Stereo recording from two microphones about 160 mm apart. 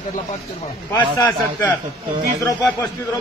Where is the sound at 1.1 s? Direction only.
20° left (ahead or behind).